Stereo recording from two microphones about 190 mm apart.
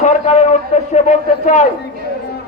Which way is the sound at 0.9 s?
40° left (ahead or behind).